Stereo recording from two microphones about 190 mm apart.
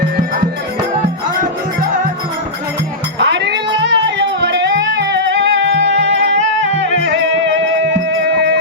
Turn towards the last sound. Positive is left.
turn(degrees=-70)  # may be behind; listen again after turning